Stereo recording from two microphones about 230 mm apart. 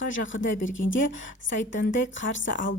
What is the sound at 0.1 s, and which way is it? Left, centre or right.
A woman's voice, left.